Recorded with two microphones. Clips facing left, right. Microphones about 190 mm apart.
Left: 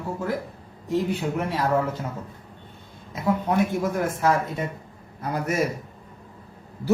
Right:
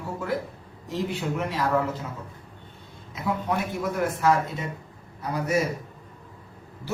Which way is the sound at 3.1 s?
45° left (ahead or behind).